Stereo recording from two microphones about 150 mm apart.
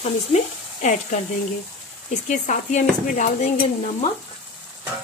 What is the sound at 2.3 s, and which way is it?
Speech, 55° left (ahead or behind).